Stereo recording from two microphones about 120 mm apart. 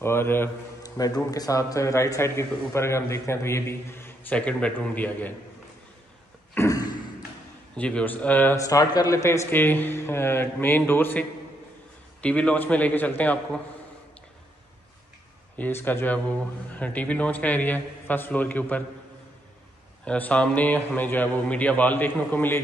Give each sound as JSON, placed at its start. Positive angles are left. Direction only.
{"t": 0.0, "sound": "a man's voice", "side_deg": 20}
{"t": 0.8, "sound": "a man's voice", "side_deg": 30}
{"t": 6.5, "sound": "a sound", "side_deg": 25}
{"t": 7.7, "sound": "speech", "side_deg": 10}
{"t": 8.5, "sound": "a man's voice", "side_deg": 30}
{"t": 15.5, "sound": "speech", "side_deg": 15}
{"t": 20.1, "sound": "speech", "side_deg": 10}